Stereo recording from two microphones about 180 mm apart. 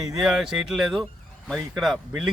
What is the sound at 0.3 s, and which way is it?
A man's voice, centre (ahead or behind).